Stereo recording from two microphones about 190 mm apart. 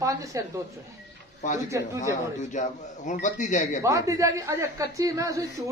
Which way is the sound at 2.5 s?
40° left (ahead or behind).